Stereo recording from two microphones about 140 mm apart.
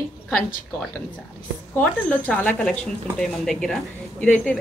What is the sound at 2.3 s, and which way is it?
Speech, 10° left (ahead or behind).